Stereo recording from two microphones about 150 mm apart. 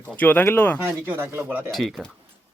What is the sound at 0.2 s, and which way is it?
Speech, 15° left (ahead or behind).